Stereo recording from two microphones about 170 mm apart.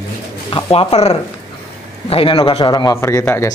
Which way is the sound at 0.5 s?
35° left (ahead or behind).